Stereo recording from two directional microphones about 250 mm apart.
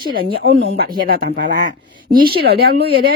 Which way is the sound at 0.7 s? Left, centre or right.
Right.